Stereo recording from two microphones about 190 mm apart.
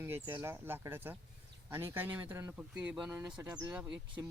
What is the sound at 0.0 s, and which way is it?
Speech, 10° right (ahead or behind).